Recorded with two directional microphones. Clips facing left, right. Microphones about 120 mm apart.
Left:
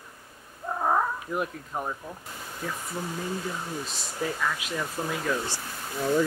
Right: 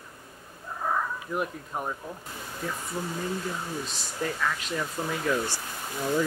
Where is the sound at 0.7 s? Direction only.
50° left (ahead or behind).